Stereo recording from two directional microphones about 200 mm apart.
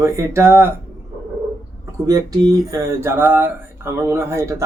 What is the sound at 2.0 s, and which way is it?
A man's voice, 15° right (ahead or behind).